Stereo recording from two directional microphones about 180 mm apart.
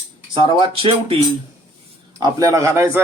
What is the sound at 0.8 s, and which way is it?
Speech, 30° right (ahead or behind).